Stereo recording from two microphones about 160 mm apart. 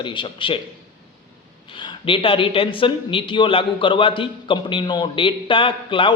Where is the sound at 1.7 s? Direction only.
30° left (ahead or behind).